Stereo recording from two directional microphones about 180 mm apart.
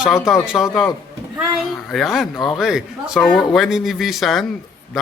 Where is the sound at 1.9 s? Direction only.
Centre (ahead or behind).